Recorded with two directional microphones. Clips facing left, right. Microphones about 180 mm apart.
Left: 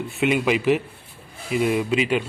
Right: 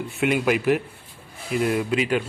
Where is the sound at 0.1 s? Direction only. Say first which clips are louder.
Left 1 dB; centre (ahead or behind).